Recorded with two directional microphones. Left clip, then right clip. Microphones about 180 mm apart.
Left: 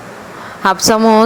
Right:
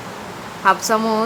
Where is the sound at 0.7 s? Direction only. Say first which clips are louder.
Left 5 dB; 40° left (ahead or behind).